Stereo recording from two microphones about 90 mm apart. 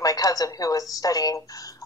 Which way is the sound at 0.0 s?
40° left (ahead or behind).